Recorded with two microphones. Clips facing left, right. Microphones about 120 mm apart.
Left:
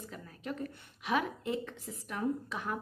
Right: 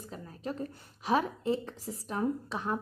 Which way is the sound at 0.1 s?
30° right (ahead or behind).